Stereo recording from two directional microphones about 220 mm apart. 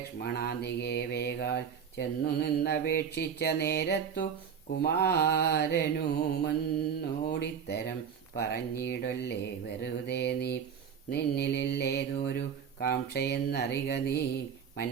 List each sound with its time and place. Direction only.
0.2 s mantra: 45° left (ahead or behind)